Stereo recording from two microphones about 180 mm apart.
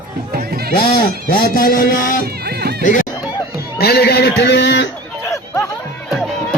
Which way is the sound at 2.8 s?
45° left (ahead or behind).